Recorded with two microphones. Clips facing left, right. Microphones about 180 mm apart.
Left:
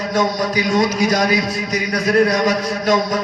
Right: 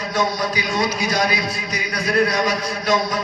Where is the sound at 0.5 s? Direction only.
45° left (ahead or behind).